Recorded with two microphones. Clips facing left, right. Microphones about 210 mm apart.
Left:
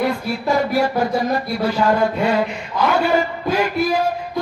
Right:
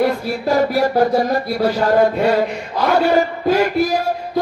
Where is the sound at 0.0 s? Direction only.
45° right (ahead or behind).